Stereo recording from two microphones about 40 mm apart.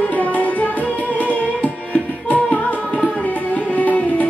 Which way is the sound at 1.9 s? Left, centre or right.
Left.